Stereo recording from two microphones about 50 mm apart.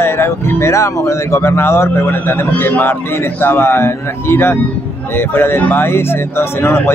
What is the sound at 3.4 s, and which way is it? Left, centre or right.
A man's voice, left.